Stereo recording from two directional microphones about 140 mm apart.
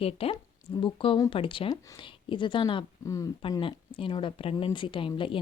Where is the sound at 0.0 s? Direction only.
45° left (ahead or behind).